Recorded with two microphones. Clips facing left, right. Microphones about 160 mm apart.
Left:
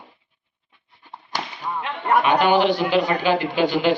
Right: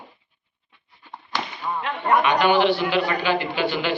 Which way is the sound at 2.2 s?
40° left (ahead or behind).